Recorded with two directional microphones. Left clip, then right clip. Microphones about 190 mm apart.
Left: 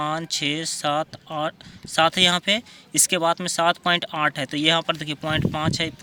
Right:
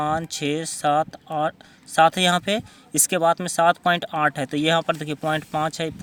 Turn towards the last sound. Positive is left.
turn(degrees=-40)  # may be behind; listen again after turning